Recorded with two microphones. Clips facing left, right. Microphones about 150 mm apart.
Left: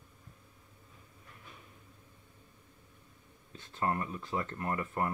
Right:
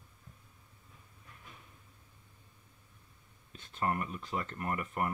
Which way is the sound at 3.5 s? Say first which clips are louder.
Left 1 dB; 20° left (ahead or behind).